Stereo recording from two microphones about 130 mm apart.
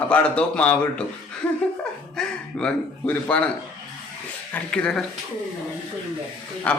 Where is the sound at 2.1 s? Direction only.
5° left (ahead or behind).